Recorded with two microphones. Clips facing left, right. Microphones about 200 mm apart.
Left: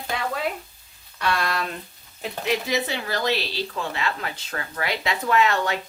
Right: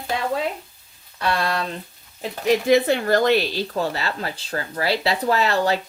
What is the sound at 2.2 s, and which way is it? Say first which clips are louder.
Speech: right 6 dB; 45° right (ahead or behind).